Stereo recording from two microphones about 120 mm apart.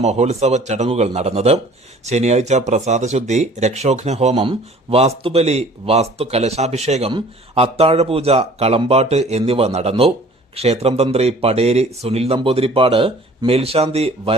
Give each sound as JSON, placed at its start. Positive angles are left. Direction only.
{"t": 0.0, "sound": "speech", "side_deg": -65}